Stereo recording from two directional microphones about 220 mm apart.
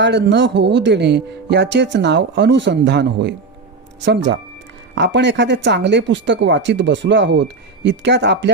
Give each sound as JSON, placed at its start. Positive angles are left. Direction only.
{"t": 0.0, "sound": "speech", "side_deg": -50}